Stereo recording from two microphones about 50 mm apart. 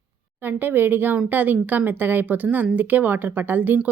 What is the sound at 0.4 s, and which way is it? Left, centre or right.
Speech, right.